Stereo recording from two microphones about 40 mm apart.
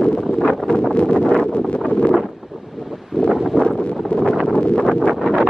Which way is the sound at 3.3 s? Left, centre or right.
Centre.